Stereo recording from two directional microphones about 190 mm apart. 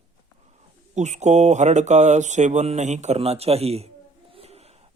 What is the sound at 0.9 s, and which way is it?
Speech, 40° right (ahead or behind).